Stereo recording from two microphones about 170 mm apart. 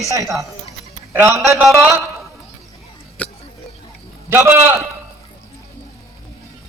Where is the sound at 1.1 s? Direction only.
15° right (ahead or behind).